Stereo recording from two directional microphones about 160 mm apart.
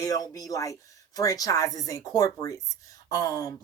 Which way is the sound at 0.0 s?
20° left (ahead or behind).